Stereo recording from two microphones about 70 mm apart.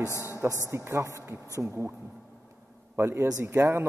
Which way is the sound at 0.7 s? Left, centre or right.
Right.